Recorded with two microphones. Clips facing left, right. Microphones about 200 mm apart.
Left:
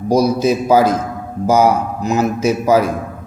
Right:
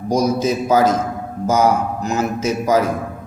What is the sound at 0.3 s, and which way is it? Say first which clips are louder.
A man's voice: left 3 dB; 10° left (ahead or behind).